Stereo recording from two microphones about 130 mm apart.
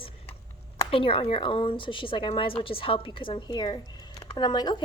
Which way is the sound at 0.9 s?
45° left (ahead or behind).